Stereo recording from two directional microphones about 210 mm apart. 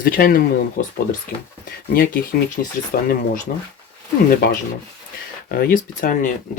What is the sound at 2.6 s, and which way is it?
Speech, 45° left (ahead or behind).